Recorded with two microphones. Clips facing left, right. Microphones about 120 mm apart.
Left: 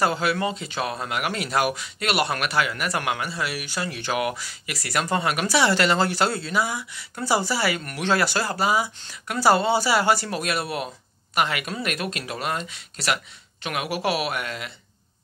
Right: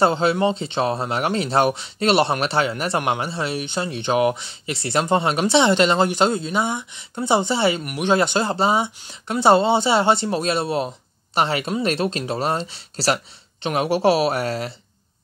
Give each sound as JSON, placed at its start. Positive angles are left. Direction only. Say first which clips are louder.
{"t": 0.0, "sound": "speech", "louder": "right 5 dB", "side_deg": -25}